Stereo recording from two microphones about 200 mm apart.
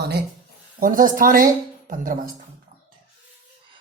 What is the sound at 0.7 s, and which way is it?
Speech, 45° right (ahead or behind).